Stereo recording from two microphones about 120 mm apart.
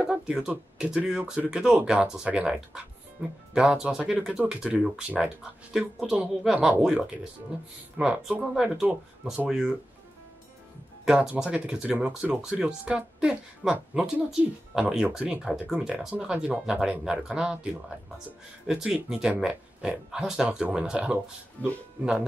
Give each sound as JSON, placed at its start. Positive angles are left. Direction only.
{"t": 0.0, "sound": "speech", "side_deg": -5}
{"t": 11.1, "sound": "speech", "side_deg": -5}
{"t": 21.6, "sound": "speech", "side_deg": 15}